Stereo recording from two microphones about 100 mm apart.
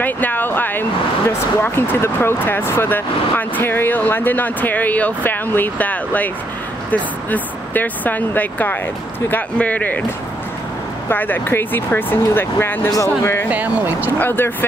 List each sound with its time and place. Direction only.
0.0 s speech: 20° left (ahead or behind)
11.1 s speech: 20° left (ahead or behind)
13.5 s speech: 15° right (ahead or behind)
14.1 s speech: 20° left (ahead or behind)